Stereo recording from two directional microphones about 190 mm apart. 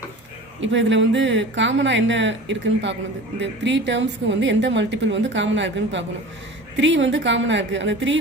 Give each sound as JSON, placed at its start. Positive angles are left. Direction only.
{"t": 0.6, "sound": "a woman's voice", "side_deg": -75}